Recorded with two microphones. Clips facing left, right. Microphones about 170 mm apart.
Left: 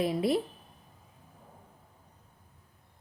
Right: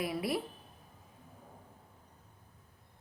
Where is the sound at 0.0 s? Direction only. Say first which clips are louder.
Left 7 dB; 25° left (ahead or behind).